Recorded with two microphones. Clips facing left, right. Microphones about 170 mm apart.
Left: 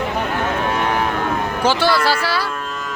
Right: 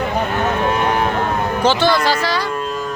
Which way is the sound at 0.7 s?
25° right (ahead or behind).